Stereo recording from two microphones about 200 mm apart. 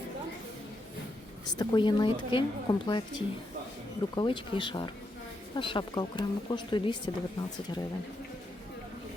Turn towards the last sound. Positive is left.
turn(degrees=20)  # may be behind; listen again after turning